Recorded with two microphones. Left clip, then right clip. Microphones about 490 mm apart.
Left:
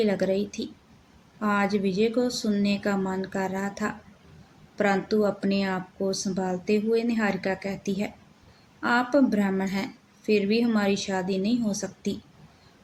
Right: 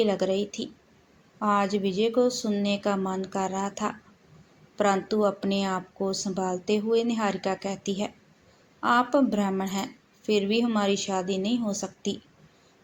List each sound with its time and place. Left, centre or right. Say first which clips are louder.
0.0 s speech: even; left